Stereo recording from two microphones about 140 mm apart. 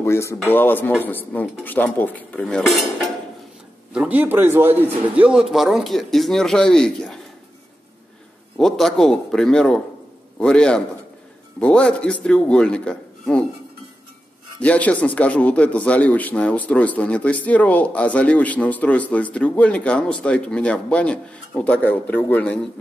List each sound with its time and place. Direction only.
0.0 s speech: 20° left (ahead or behind); by 2.9 s centre (ahead or behind)
3.9 s a man's voice: 10° right (ahead or behind)
8.5 s a man's voice: centre (ahead or behind)
14.6 s speech: 10° left (ahead or behind)